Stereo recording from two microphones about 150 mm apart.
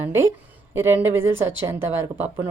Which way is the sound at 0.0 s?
15° right (ahead or behind).